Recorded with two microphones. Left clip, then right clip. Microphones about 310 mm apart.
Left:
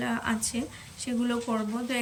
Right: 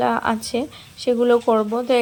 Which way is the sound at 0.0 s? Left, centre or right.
Centre.